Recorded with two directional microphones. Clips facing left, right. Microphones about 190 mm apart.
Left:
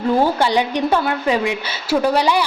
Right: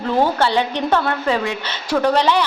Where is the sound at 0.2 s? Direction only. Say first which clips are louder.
Left 1 dB; 15° left (ahead or behind).